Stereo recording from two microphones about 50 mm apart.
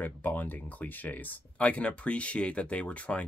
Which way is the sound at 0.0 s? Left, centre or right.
Left.